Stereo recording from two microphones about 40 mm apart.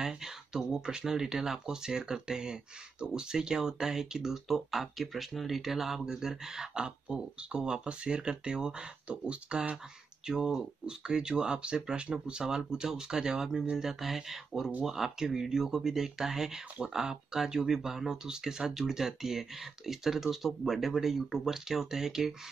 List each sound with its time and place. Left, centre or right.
0.0 s speech: centre
10.2 s speech: centre